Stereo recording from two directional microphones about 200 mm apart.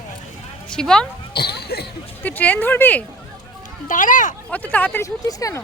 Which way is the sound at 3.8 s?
40° left (ahead or behind).